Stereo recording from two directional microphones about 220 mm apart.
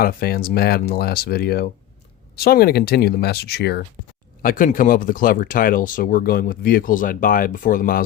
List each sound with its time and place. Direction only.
0.0 s speech: 45° left (ahead or behind)